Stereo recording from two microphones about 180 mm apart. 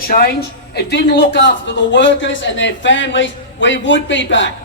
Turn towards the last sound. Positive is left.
turn(degrees=90)